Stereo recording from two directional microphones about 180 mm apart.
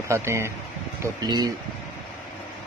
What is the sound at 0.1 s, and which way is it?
Speech, 15° right (ahead or behind).